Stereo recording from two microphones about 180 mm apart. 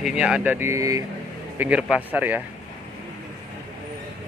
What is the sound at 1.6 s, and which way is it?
Speech, 5° right (ahead or behind).